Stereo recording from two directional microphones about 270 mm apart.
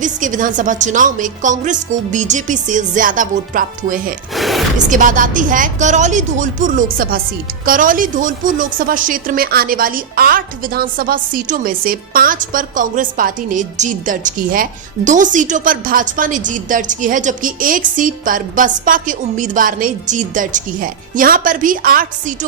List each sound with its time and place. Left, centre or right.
0.0 s a woman's voice: right
4.4 s a sound: centre
4.9 s a woman's voice: right